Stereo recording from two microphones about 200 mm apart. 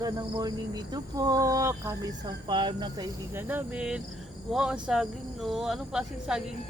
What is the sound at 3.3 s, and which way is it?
Speech, 10° right (ahead or behind).